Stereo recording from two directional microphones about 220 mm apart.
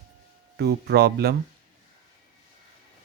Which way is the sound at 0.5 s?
50° right (ahead or behind).